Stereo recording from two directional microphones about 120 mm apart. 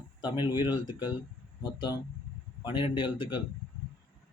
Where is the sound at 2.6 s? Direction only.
40° left (ahead or behind).